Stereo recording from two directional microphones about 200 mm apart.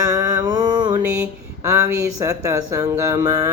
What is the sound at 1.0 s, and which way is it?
Speech, 10° right (ahead or behind).